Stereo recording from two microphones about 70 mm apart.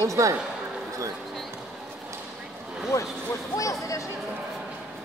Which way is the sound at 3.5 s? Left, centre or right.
Left.